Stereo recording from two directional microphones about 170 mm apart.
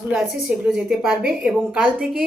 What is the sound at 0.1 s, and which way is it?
A woman's voice, 5° right (ahead or behind).